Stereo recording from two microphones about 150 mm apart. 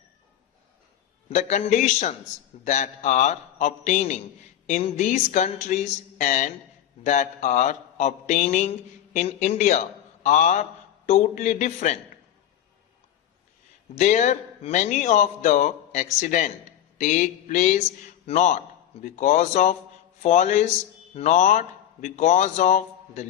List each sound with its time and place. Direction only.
1.3 s a man's voice: 50° left (ahead or behind)
13.9 s a man's voice: 50° left (ahead or behind)